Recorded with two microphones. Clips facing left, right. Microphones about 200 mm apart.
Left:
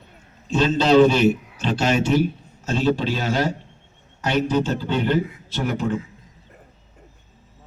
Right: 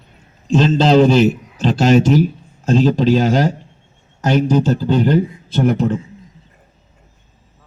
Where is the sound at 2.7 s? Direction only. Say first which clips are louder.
Right 8 dB; 40° right (ahead or behind).